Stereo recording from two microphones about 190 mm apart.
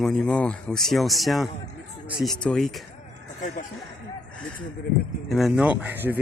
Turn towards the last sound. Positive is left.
turn(degrees=-10)  # may be behind; listen again after turning